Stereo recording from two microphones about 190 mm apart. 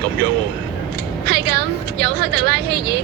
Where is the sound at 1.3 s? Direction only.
60° right (ahead or behind).